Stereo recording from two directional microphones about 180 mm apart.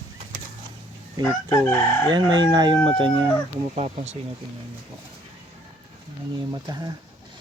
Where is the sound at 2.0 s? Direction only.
25° right (ahead or behind).